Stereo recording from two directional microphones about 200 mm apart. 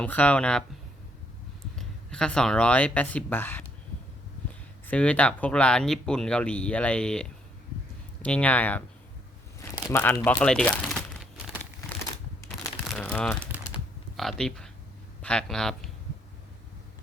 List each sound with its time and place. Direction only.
0.0 s speech: 5° left (ahead or behind)
1.7 s speech: 5° left (ahead or behind)
4.9 s speech: 5° left (ahead or behind)
9.6 s a sound: 15° left (ahead or behind)
10.0 s crumpling: 10° left (ahead or behind)
12.9 s crumpling: 5° left (ahead or behind)
14.2 s speech: centre (ahead or behind)